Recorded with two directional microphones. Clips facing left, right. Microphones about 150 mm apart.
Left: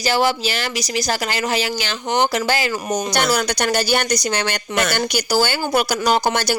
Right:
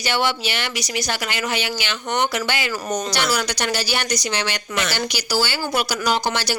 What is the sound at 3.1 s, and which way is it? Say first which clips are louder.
Speech: left 4 dB; 50° left (ahead or behind).